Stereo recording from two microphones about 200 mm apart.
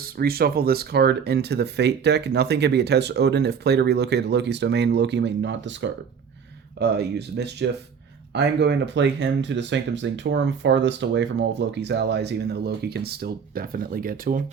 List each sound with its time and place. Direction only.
0.0 s speech: 50° right (ahead or behind); by 5.9 s 65° right (ahead or behind)
6.7 s speech: 55° right (ahead or behind)